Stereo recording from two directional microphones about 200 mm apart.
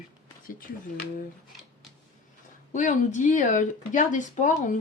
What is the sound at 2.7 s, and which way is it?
Speech, 40° left (ahead or behind).